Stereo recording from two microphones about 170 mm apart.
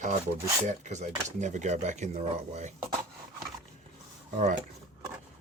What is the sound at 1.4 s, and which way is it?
Speech, 45° right (ahead or behind).